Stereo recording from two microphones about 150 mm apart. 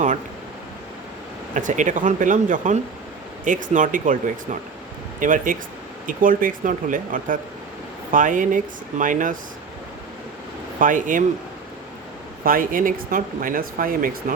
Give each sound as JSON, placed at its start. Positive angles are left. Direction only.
{"t": 1.5, "sound": "speech", "side_deg": -55}
{"t": 5.2, "sound": "speech", "side_deg": -60}
{"t": 10.8, "sound": "speech", "side_deg": -60}
{"t": 12.5, "sound": "speech", "side_deg": -65}